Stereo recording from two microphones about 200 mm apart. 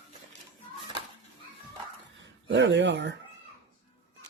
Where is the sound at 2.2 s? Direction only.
70° right (ahead or behind).